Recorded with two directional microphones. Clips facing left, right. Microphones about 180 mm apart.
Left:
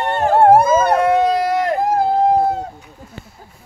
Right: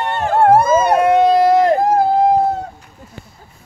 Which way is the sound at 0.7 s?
10° right (ahead or behind).